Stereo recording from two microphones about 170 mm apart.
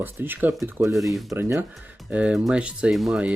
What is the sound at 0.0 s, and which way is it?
Speech, 10° right (ahead or behind).